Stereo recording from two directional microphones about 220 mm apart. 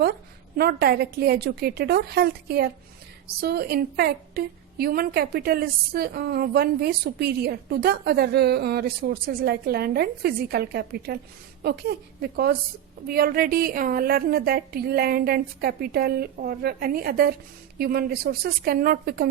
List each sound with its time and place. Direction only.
0.0 s a woman's voice: 45° right (ahead or behind)